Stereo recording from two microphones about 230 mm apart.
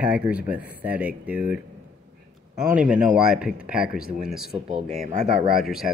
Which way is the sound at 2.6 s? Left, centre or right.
Centre.